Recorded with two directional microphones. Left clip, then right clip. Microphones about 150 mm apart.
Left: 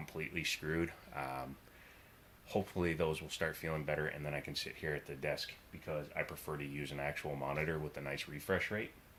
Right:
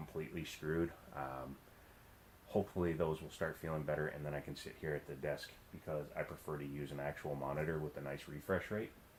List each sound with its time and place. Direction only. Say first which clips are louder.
0.0 s speech: left 6 dB; 15° left (ahead or behind)
0.6 s speech: left 1 dB; 25° left (ahead or behind)
2.5 s speech: left 1 dB; 20° left (ahead or behind)